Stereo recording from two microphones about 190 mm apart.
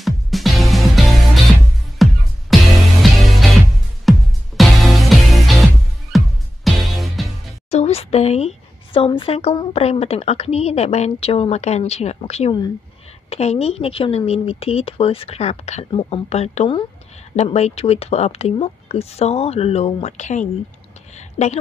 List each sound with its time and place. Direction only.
0.0 s music: centre (ahead or behind)
7.7 s a woman's voice: 35° left (ahead or behind)